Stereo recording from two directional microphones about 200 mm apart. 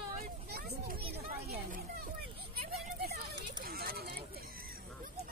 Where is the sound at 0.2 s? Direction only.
50° right (ahead or behind).